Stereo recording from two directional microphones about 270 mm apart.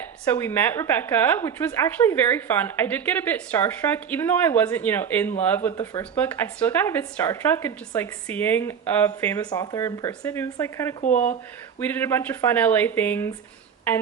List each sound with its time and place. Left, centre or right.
0.3 s speech: centre
11.0 s speech: left
11.8 s speech: centre